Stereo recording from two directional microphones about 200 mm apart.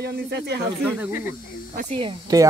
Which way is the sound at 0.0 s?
55° right (ahead or behind).